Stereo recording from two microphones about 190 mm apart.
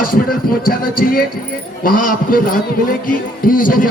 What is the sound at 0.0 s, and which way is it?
A man's voice, 50° left (ahead or behind).